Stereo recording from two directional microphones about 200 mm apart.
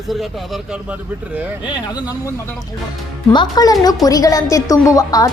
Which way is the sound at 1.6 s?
20° left (ahead or behind).